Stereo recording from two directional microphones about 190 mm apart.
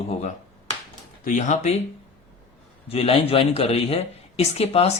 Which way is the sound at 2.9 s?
30° left (ahead or behind).